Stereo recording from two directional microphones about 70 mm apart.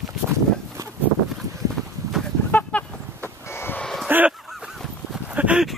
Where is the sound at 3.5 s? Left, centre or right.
Left.